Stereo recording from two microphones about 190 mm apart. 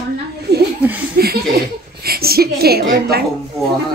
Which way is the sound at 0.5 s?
60° right (ahead or behind).